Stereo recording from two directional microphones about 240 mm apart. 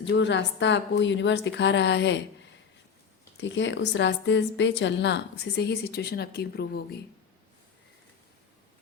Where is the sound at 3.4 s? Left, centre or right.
Left.